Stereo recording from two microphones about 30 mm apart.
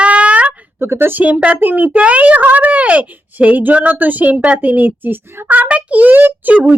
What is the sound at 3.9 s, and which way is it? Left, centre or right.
A woman's voice, right.